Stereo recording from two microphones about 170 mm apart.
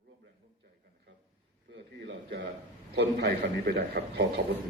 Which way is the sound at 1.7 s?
85° right.